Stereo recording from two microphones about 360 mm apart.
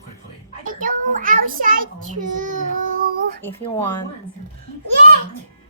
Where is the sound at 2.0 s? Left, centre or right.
Right.